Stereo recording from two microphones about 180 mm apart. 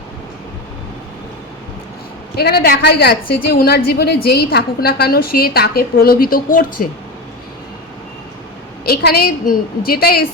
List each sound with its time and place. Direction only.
2.3 s a woman's voice: 60° left (ahead or behind)
8.8 s a woman's voice: 60° left (ahead or behind)